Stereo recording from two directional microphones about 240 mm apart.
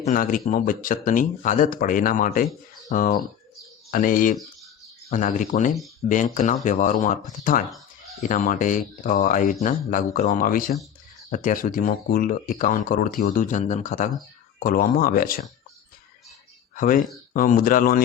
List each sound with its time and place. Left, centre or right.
0.0 s speech: left
16.7 s speech: left